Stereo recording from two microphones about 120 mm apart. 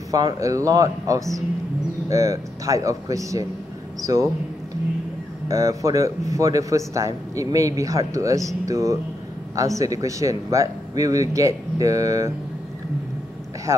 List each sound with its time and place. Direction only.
0.1 s speech: 30° right (ahead or behind)
5.5 s speech: 25° right (ahead or behind)
13.7 s speech: 20° right (ahead or behind)